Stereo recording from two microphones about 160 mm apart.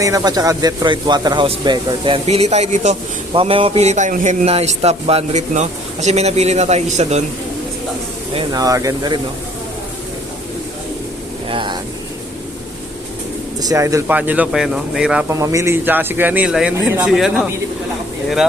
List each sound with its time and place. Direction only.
0.0 s speech: 20° right (ahead or behind); by 7.3 s 45° right (ahead or behind)
8.5 s speech: 20° right (ahead or behind)
11.4 s a sound: 30° right (ahead or behind)
13.6 s speech: 20° right (ahead or behind); by 15.3 s 5° right (ahead or behind)
15.3 s speech: 20° right (ahead or behind); by 17.5 s centre (ahead or behind)